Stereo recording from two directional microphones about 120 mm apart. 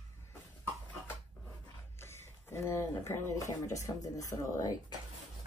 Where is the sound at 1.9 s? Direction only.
20° left (ahead or behind).